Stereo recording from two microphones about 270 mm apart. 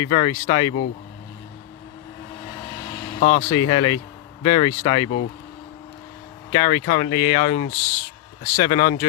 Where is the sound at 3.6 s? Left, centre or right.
Centre.